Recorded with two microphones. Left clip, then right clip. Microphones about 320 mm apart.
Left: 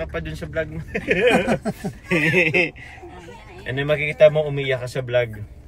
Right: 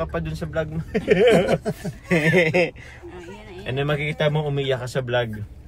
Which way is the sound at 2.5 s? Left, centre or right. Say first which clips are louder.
Left 1 dB; centre.